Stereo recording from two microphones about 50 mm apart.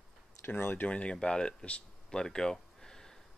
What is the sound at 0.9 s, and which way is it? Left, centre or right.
Speech, left.